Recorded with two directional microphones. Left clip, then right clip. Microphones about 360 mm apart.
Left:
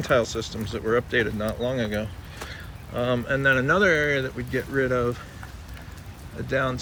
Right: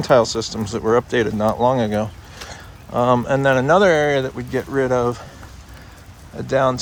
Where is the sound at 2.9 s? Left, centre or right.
Centre.